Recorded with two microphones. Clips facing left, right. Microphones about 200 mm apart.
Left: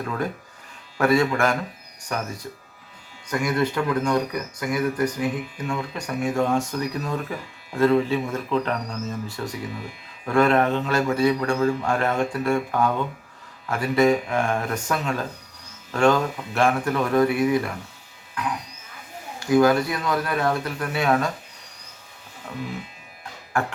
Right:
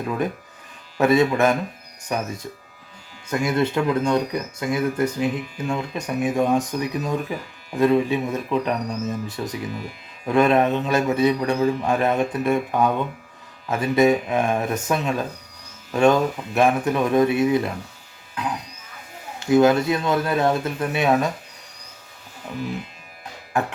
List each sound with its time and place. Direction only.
0.0 s speech: 15° right (ahead or behind)
19.4 s speech: 25° right (ahead or behind)
23.5 s speech: 20° right (ahead or behind)